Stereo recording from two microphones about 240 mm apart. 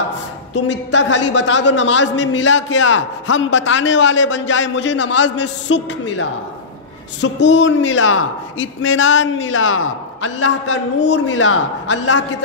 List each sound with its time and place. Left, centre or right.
0.9 s a man's voice: left
5.1 s a man's voice: left
7.2 s a man's voice: left
11.2 s a man's voice: left